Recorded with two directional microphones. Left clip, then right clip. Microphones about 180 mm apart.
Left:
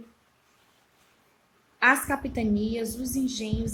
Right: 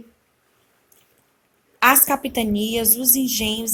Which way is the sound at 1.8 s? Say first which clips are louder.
Right 6 dB; 30° right (ahead or behind).